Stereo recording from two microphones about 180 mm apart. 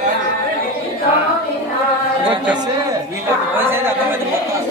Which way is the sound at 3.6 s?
10° right (ahead or behind).